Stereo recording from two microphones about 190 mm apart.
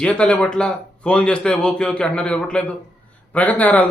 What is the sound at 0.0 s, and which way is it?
Speech, 5° left (ahead or behind).